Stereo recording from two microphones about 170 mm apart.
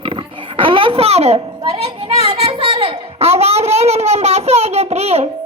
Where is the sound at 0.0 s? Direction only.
30° right (ahead or behind).